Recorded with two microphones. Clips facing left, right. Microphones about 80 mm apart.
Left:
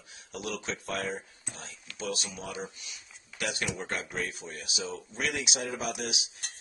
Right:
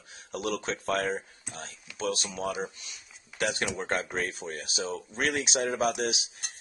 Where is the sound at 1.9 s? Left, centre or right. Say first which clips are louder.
Right 3 dB; centre.